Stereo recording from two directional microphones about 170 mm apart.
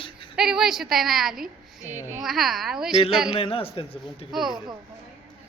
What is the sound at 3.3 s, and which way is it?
Speech, 35° left (ahead or behind).